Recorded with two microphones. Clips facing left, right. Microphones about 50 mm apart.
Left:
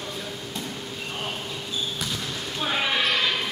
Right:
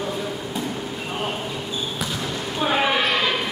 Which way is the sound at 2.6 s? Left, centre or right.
Centre.